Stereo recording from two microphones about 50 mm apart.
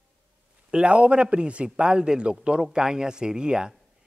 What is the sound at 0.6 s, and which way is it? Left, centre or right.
A man's voice, right.